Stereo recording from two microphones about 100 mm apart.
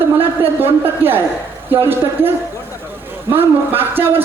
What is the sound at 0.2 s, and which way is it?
Speech, 20° right (ahead or behind).